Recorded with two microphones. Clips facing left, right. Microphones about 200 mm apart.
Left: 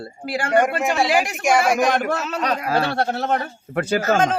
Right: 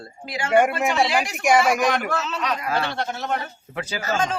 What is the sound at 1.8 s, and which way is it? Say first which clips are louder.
A man's voice: left 3 dB; 45° left (ahead or behind).